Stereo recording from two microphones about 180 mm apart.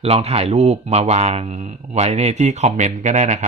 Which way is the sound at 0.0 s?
35° right (ahead or behind).